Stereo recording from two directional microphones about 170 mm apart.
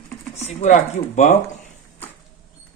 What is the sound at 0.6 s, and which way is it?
Speech, 45° left (ahead or behind).